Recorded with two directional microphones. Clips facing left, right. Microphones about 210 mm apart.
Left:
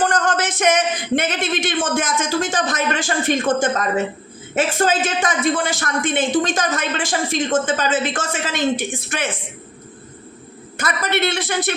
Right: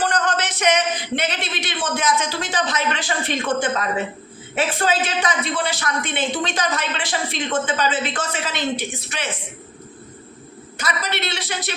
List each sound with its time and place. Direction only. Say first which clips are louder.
0.0 s a man's voice: left 3 dB; 50° left (ahead or behind)
10.8 s a man's voice: left 5 dB; 50° left (ahead or behind)